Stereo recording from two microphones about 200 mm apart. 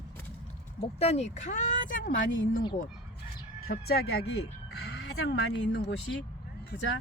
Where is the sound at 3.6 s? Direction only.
50° left (ahead or behind).